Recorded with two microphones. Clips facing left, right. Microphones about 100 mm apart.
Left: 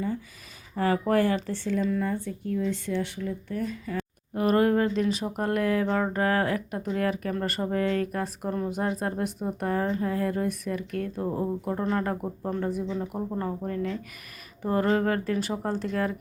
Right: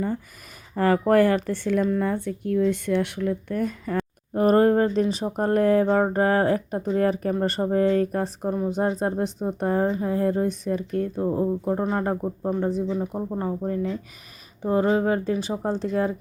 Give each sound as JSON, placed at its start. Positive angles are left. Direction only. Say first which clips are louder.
{"t": 0.8, "sound": "speech", "louder": "right 5 dB", "side_deg": -45}
{"t": 4.4, "sound": "speech", "louder": "right 4 dB", "side_deg": -35}
{"t": 8.4, "sound": "speech", "louder": "right 4 dB", "side_deg": -15}
{"t": 8.7, "sound": "speech", "louder": "right 5 dB", "side_deg": -30}
{"t": 12.5, "sound": "speech", "louder": "right 4 dB", "side_deg": -30}
{"t": 12.8, "sound": "speech", "louder": "right 4 dB", "side_deg": -15}